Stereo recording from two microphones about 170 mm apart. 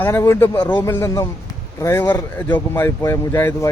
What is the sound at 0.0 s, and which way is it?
Speech, 15° left (ahead or behind).